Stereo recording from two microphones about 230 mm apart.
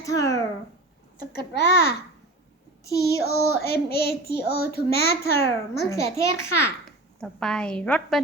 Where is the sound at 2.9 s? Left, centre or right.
Centre.